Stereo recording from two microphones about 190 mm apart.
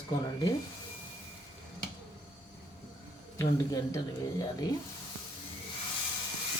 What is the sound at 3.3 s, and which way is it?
Speech, 20° left (ahead or behind).